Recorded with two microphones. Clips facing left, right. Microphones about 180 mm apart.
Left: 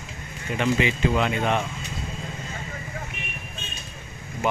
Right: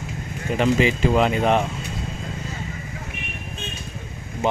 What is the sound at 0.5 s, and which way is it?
Speech, 35° right (ahead or behind).